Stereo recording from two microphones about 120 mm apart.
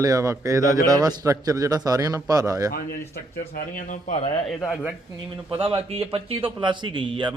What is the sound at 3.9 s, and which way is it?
Speech, 80° left.